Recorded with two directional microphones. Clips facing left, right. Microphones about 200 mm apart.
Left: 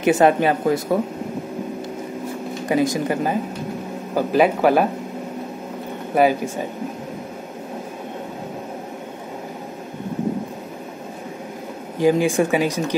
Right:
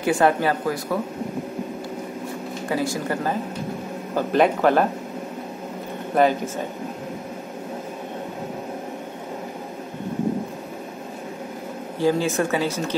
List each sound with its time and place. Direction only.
0.0 s speech: 20° left (ahead or behind)
2.7 s speech: 20° left (ahead or behind)
6.1 s speech: 10° left (ahead or behind)
12.0 s speech: 15° left (ahead or behind)